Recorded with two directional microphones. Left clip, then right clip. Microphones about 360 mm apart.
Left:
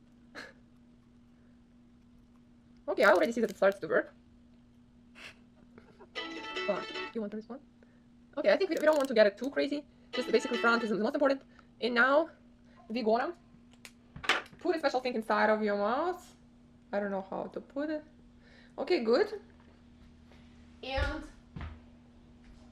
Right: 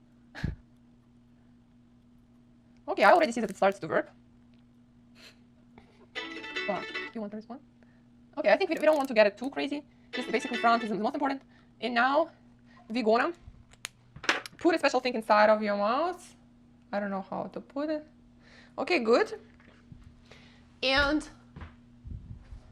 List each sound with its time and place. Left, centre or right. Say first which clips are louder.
2.8 s a woman's voice: right 3 dB; right
5.7 s music: right 2 dB; centre
8.4 s a woman's voice: right 2 dB; centre
12.9 s a woman's voice: right 3 dB; right
14.6 s speech: right 5 dB; right
14.9 s a woman's voice: right 6 dB; right